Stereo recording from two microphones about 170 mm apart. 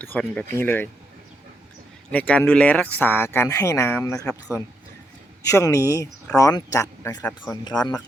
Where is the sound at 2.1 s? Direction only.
10° left (ahead or behind); by 7.9 s 25° left (ahead or behind).